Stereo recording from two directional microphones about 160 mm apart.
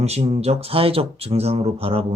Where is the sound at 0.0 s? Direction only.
40° right (ahead or behind).